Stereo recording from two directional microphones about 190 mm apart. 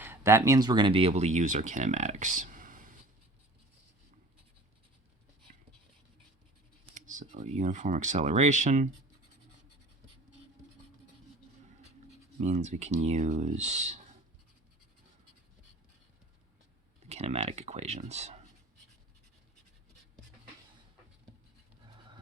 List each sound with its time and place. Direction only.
0.0 s speech: 10° right (ahead or behind); by 2.8 s 45° right (ahead or behind)
6.9 s speech: 40° right (ahead or behind)
12.4 s speech: 40° right (ahead or behind)
17.1 s speech: 35° right (ahead or behind)